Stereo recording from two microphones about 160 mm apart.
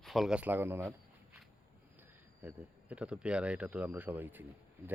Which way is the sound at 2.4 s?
10° right (ahead or behind).